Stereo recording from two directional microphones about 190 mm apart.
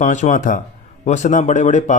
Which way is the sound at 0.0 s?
40° left (ahead or behind).